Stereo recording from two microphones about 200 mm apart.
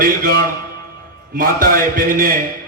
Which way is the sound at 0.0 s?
45° right (ahead or behind).